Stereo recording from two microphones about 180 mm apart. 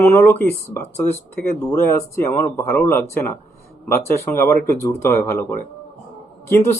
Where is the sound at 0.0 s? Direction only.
15° left (ahead or behind).